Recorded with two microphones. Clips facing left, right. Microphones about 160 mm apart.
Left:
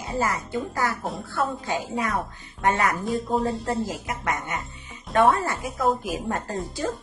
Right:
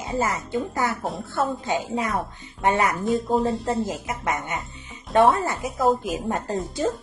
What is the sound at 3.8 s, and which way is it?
Speech, 20° right (ahead or behind).